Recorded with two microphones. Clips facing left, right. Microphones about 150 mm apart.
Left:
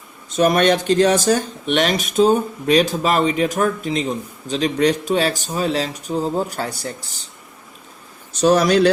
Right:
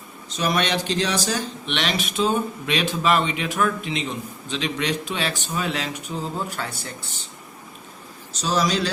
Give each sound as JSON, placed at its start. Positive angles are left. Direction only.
{"t": 0.3, "sound": "speech", "side_deg": 50}
{"t": 8.3, "sound": "speech", "side_deg": 60}